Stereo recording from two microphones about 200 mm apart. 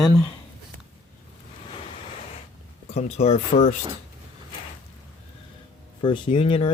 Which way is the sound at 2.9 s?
35° left (ahead or behind).